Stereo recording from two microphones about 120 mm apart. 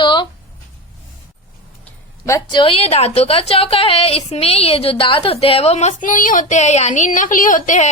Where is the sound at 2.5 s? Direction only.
50° left (ahead or behind).